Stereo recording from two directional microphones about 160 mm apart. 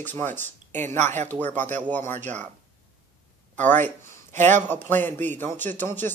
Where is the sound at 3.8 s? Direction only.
15° left (ahead or behind).